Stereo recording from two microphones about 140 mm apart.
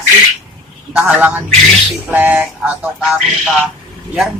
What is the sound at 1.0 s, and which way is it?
Music, 10° right (ahead or behind).